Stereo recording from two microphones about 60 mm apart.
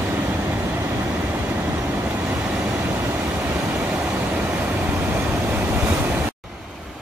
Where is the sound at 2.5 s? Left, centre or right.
Centre; by 6.1 s right.